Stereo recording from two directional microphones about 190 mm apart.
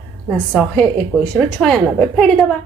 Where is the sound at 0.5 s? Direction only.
5° left (ahead or behind).